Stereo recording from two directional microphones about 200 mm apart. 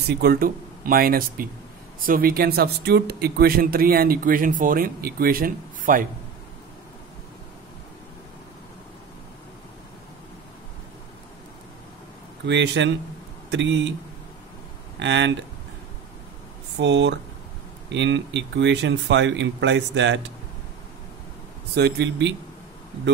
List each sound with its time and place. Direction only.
0.1 s speech: 50° right (ahead or behind)
12.4 s speech: 65° right (ahead or behind)
15.0 s speech: 65° right (ahead or behind)
16.8 s speech: 65° right (ahead or behind)
21.7 s speech: 55° right (ahead or behind)